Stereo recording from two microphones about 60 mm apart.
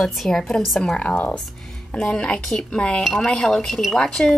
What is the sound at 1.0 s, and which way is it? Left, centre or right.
Speech, centre.